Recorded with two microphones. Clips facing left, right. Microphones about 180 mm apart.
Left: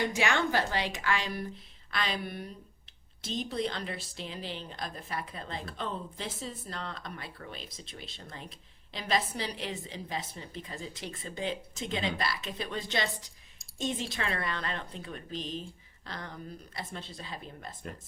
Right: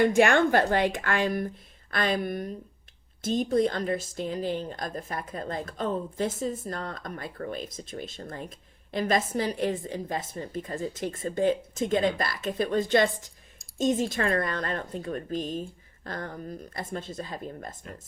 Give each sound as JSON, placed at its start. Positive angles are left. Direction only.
{"t": 0.0, "sound": "speech", "side_deg": -50}